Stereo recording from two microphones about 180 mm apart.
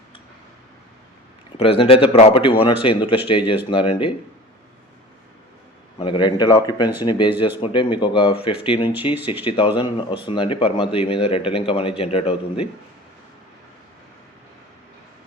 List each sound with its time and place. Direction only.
1.5 s speech: 30° left (ahead or behind)
6.0 s speech: 25° left (ahead or behind)